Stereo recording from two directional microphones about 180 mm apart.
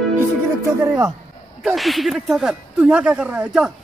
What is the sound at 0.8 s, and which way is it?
Speech, 15° right (ahead or behind).